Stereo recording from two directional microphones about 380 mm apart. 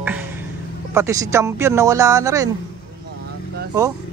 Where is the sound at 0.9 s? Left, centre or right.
Centre.